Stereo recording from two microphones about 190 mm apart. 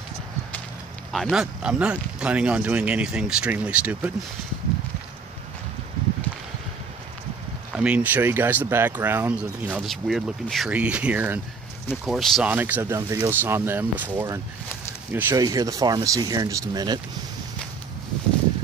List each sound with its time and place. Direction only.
1.1 s speech: centre (ahead or behind)
7.7 s speech: 5° right (ahead or behind)